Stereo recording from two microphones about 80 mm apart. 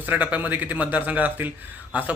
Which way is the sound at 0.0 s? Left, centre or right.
Centre.